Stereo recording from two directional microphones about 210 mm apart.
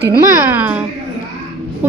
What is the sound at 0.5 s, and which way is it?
Speech, 10° right (ahead or behind).